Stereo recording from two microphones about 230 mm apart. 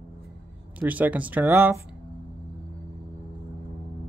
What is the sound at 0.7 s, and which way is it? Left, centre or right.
Speech, centre.